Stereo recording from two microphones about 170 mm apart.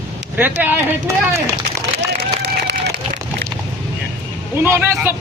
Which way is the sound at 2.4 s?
80° right.